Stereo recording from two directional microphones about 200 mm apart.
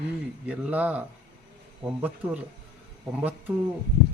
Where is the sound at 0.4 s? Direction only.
5° right (ahead or behind).